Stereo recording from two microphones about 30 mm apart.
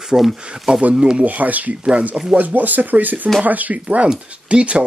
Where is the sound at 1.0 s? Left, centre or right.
Right.